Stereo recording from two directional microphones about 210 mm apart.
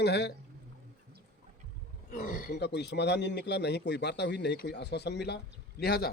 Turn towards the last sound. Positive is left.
turn(degrees=50)  # may be behind; listen again after turning